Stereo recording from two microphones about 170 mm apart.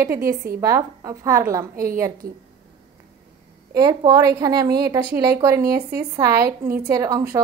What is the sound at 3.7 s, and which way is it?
A woman's voice, 25° right (ahead or behind).